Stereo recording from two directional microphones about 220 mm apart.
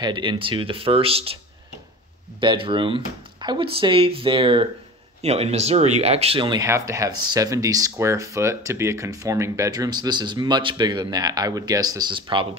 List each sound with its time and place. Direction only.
0.0 s speech: 20° right (ahead or behind)
2.4 s speech: 20° right (ahead or behind)